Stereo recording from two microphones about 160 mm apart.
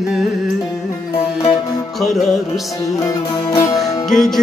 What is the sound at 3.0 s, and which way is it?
Music, 20° left (ahead or behind).